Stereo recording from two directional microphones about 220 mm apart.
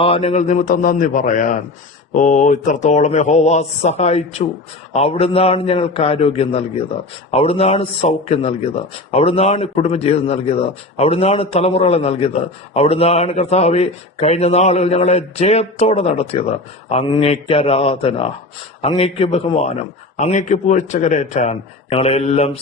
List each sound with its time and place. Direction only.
0.0 s a man's voice: 25° left (ahead or behind)